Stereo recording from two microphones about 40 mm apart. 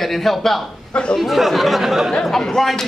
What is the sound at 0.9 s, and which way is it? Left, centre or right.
Speech, left.